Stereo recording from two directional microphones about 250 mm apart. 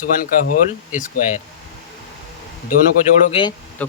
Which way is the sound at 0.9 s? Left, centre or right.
Left.